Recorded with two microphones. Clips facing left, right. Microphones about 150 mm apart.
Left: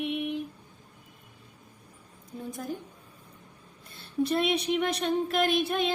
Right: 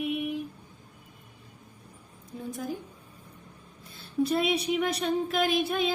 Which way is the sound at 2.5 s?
Centre (ahead or behind).